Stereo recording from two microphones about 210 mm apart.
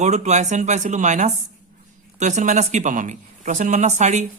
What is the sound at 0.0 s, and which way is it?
Speech, 35° right (ahead or behind).